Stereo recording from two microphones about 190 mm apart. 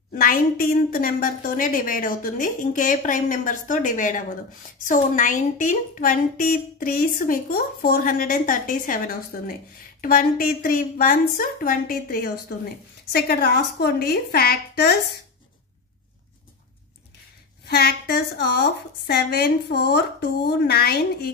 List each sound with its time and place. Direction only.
0.1 s a woman's voice: 50° left (ahead or behind)
17.6 s a woman's voice: 55° left (ahead or behind)